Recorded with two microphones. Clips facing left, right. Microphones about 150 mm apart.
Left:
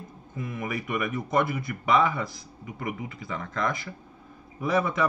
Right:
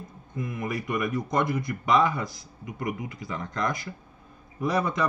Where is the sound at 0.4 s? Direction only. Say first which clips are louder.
Right 1 dB; 5° left (ahead or behind).